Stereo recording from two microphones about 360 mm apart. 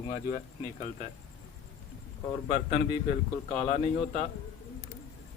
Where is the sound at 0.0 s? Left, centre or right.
Left.